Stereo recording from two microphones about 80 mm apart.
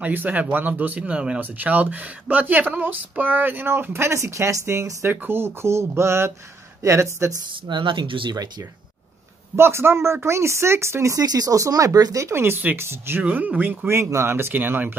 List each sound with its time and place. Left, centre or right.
0.0 s speech: centre; by 7.3 s right
7.6 s speech: right
9.6 s speech: right
11.2 s speech: right
13.2 s speech: centre
13.8 s speech: right